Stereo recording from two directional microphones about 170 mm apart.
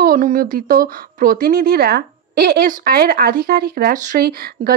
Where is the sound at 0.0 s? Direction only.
55° right (ahead or behind).